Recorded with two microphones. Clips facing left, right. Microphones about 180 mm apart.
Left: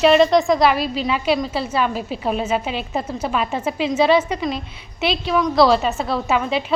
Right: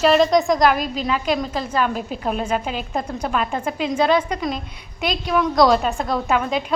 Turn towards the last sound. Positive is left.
turn(degrees=5)  # may be behind; listen again after turning